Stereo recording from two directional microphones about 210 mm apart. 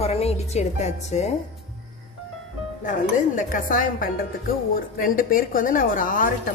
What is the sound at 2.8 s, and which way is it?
A woman's voice, 40° left (ahead or behind).